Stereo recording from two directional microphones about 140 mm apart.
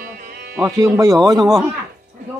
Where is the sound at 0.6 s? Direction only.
25° right (ahead or behind).